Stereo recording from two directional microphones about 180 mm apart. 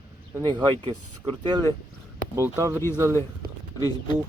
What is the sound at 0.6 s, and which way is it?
Speech, 25° right (ahead or behind).